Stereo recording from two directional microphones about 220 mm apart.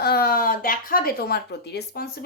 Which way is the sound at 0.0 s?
45° left (ahead or behind).